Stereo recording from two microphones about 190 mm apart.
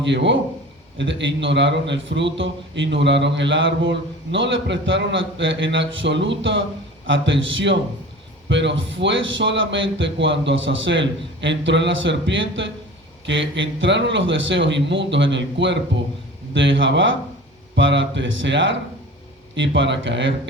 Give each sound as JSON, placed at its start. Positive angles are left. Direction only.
{"t": 0.0, "sound": "a man's voice", "side_deg": -70}